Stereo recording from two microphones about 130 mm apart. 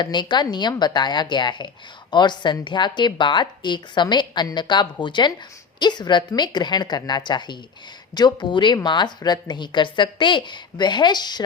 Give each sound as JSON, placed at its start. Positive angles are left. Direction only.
{"t": 0.0, "sound": "speech", "side_deg": 35}